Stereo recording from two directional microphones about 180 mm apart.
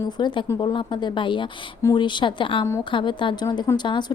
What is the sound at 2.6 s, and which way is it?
Speech, 15° left (ahead or behind).